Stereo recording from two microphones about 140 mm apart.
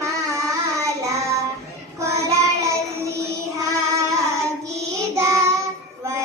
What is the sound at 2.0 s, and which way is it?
Child singing, 20° right (ahead or behind).